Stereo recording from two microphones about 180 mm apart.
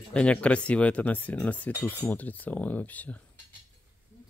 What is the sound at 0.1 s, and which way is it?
Speech, 5° left (ahead or behind).